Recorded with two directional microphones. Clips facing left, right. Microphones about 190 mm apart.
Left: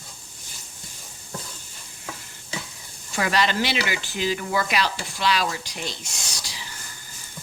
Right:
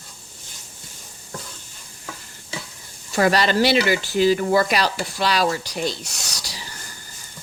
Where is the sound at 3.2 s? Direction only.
40° right (ahead or behind).